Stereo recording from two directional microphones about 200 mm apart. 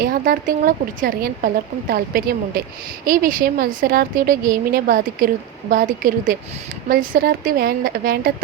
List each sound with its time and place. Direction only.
0.0 s a woman's voice: 45° right (ahead or behind)